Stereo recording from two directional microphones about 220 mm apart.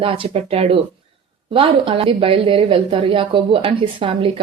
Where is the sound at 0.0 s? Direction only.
25° right (ahead or behind).